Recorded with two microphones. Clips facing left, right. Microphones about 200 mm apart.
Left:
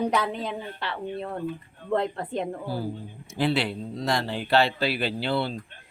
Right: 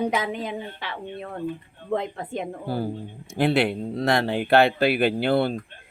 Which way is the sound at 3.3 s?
55° right (ahead or behind).